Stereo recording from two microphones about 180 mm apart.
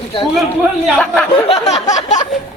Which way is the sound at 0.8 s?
5° left (ahead or behind).